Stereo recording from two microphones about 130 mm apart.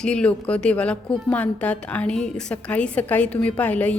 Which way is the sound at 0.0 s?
5° left (ahead or behind).